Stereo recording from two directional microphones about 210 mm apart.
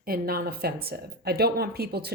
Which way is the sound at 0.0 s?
45° right (ahead or behind).